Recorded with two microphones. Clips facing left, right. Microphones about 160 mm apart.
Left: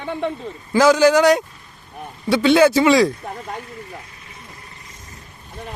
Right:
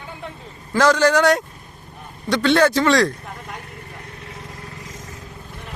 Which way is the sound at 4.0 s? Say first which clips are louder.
Right 4 dB; 65° right (ahead or behind).